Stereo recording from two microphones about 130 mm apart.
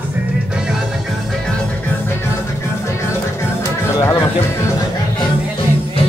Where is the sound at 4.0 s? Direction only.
20° left (ahead or behind).